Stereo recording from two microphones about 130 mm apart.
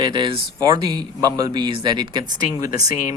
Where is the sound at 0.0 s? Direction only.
40° right (ahead or behind).